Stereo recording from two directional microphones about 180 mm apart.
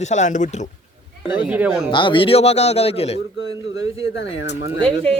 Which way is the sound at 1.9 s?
25° left (ahead or behind).